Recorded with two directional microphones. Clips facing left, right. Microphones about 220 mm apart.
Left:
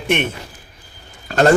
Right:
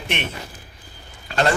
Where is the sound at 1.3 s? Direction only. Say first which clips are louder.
Left 8 dB; 45° left (ahead or behind).